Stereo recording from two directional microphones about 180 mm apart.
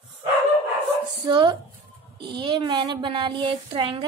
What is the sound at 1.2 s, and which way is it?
Speech, 25° right (ahead or behind).